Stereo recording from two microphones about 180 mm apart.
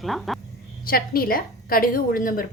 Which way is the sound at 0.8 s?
55° left (ahead or behind).